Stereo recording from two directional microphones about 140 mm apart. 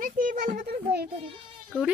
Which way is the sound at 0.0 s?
75° right (ahead or behind).